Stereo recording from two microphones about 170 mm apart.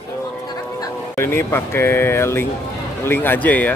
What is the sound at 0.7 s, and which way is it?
A man's voice, 15° left (ahead or behind).